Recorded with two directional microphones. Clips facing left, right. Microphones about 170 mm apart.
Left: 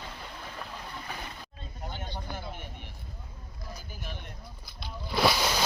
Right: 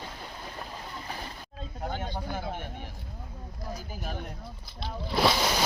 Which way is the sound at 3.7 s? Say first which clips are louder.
Right 5 dB; 40° right (ahead or behind).